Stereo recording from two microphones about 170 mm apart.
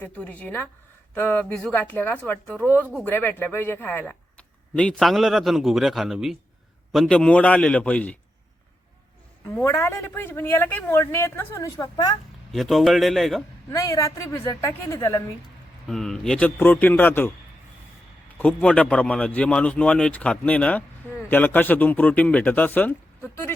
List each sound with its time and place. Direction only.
0.0 s a man's voice: 10° left (ahead or behind)
9.5 s a man's voice: 15° left (ahead or behind)
12.5 s speech: centre (ahead or behind)
13.7 s a man's voice: 20° left (ahead or behind)
15.9 s a man's voice: centre (ahead or behind)
18.3 s a man's voice: 5° left (ahead or behind)